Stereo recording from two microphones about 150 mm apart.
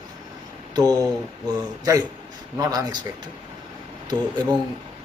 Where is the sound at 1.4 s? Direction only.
25° right (ahead or behind).